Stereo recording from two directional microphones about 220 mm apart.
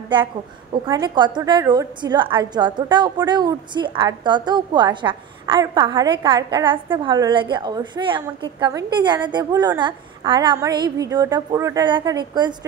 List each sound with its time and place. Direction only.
0.8 s a woman's voice: 20° right (ahead or behind)